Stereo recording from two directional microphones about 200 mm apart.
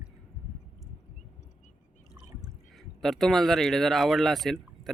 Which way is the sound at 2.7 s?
Centre (ahead or behind).